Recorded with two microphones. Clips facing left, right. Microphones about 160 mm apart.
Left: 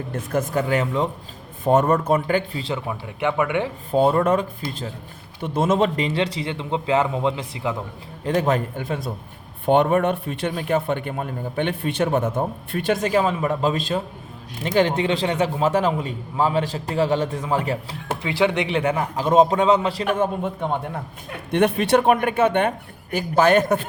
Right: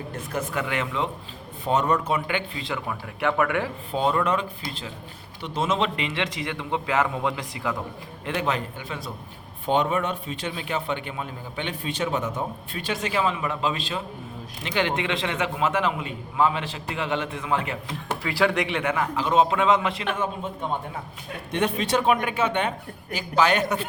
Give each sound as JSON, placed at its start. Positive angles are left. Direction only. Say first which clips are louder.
{"t": 0.1, "sound": "a man's voice", "louder": "left 7 dB", "side_deg": 45}
{"t": 1.6, "sound": "a man's voice", "louder": "left 5 dB", "side_deg": 50}
{"t": 3.9, "sound": "a man's voice", "louder": "left 6 dB", "side_deg": 45}
{"t": 8.2, "sound": "a man's voice", "louder": "left 6 dB", "side_deg": 40}
{"t": 18.2, "sound": "a man's voice", "louder": "left 3 dB", "side_deg": 20}
{"t": 20.1, "sound": "a man's voice", "louder": "left 6 dB", "side_deg": 55}